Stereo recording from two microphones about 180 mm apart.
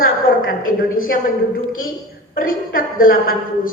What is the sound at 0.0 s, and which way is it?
A woman's voice, 50° left (ahead or behind).